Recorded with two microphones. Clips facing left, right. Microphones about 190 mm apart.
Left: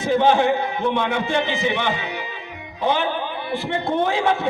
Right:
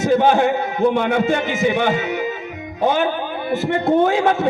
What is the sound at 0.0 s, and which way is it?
A man's voice, 45° right (ahead or behind).